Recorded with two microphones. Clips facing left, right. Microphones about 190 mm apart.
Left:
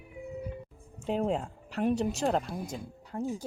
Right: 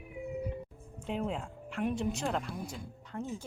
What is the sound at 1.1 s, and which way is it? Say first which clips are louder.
Speech: left 6 dB; 40° left (ahead or behind).